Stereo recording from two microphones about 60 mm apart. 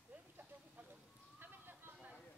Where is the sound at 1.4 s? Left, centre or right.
Right.